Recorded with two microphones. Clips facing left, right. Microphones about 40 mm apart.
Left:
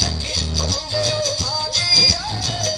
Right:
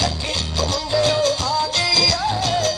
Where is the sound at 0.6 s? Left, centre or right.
Right.